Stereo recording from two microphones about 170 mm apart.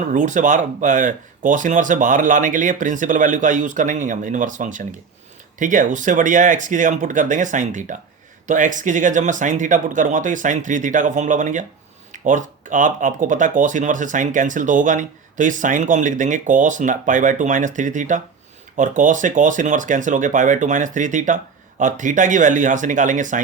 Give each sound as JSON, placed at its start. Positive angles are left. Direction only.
{"t": 0.0, "sound": "speech", "side_deg": -45}